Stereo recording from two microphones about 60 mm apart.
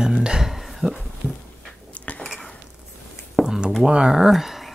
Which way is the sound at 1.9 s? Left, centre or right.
Left.